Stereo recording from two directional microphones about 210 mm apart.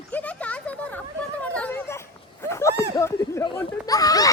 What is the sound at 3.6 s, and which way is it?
Speech, 15° left (ahead or behind).